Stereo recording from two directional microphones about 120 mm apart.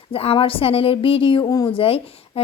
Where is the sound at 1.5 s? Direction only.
30° left (ahead or behind).